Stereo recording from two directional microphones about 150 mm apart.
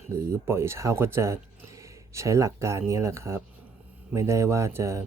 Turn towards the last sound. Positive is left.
turn(degrees=-20)  # may be behind; listen again after turning